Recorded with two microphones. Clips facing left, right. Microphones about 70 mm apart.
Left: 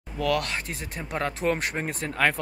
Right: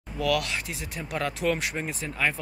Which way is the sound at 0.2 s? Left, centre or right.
Left.